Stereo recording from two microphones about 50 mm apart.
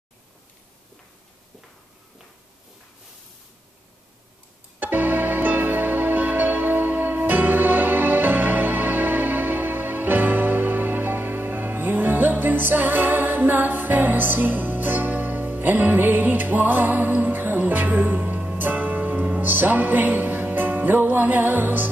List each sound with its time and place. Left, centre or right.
4.7 s music: right